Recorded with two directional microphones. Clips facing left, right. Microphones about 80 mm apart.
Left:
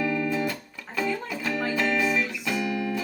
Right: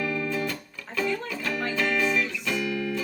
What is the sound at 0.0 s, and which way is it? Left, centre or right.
Music, left.